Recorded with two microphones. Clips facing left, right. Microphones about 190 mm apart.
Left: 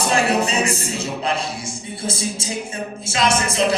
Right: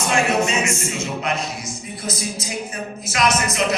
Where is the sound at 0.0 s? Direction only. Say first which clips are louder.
Left 1 dB; 35° left (ahead or behind).